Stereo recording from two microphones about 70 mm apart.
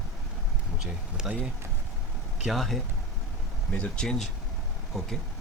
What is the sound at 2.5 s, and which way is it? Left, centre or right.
Speech, centre.